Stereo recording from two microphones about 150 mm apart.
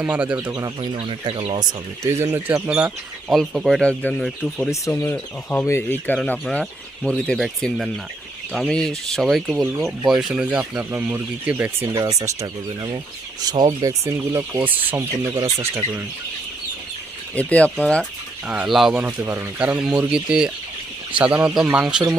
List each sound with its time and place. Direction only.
0.0 s speech: 10° right (ahead or behind)
0.5 s speech: 25° right (ahead or behind)
0.9 s speech: 40° right (ahead or behind)
2.0 s speech: 15° right (ahead or behind); by 4.7 s 5° left (ahead or behind)
4.7 s speech: 20° left (ahead or behind); by 15.8 s 15° right (ahead or behind)
17.3 s speech: 10° left (ahead or behind)
18.4 s speech: 5° right (ahead or behind)
19.0 s speech: 15° right (ahead or behind)